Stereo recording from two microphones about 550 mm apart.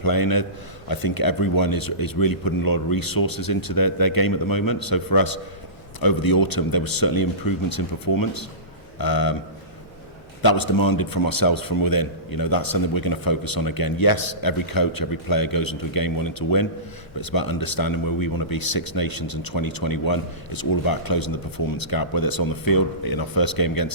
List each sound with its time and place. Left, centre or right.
0.0 s speech: left
10.4 s speech: left